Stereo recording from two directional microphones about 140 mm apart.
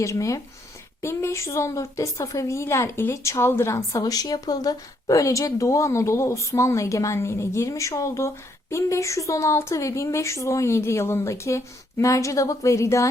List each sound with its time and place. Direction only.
0.0 s a woman's voice: 25° left (ahead or behind)